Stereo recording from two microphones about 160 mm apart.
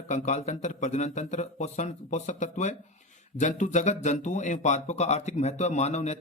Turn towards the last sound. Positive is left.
turn(degrees=45)  # may be behind; listen again after turning